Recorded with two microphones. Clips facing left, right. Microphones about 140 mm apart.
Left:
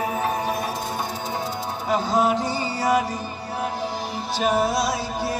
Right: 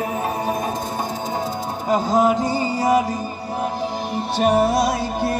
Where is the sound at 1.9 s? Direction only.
45° right (ahead or behind).